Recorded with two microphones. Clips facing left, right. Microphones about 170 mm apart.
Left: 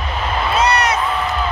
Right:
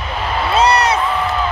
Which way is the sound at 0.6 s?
30° right (ahead or behind).